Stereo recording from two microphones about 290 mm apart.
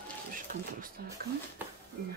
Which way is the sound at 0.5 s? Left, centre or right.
Right.